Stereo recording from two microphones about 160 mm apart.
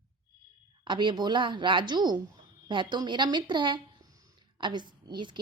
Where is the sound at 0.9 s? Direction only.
30° right (ahead or behind).